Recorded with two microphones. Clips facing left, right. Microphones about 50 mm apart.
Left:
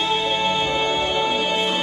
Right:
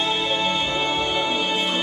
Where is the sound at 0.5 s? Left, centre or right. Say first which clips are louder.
Left 2 dB; centre.